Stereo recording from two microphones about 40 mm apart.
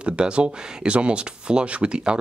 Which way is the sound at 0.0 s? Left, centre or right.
Right.